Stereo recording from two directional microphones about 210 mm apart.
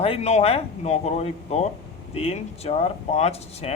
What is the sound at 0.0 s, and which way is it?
Speech, 30° left (ahead or behind).